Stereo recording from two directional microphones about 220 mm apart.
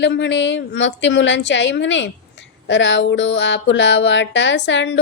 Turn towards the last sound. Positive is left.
turn(degrees=55)  # may be behind; listen again after turning